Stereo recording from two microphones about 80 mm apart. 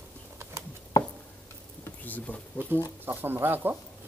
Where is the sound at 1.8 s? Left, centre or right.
Left.